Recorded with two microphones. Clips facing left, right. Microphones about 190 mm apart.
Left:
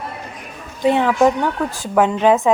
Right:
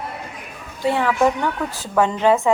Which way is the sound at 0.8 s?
20° left (ahead or behind).